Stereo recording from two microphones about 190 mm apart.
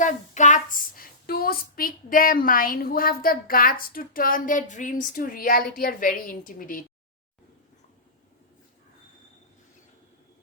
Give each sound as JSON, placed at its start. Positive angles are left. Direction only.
{"t": 0.0, "sound": "speech", "side_deg": 40}